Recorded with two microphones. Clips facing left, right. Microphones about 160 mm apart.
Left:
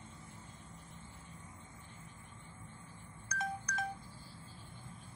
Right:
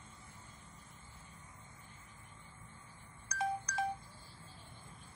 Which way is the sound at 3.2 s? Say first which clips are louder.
Right 3 dB; 30° right (ahead or behind).